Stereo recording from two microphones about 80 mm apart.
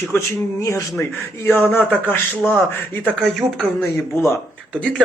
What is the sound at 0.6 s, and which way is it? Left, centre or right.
Speech, left.